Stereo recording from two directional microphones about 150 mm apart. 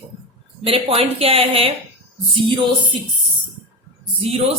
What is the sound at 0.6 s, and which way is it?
A woman's voice, 40° right (ahead or behind).